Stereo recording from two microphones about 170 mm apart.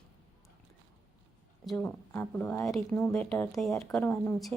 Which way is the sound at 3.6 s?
Centre (ahead or behind).